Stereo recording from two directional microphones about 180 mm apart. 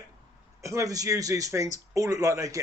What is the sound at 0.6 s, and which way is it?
A man's voice, 15° right (ahead or behind).